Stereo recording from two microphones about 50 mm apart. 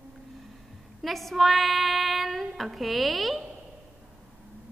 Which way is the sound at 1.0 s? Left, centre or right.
Centre.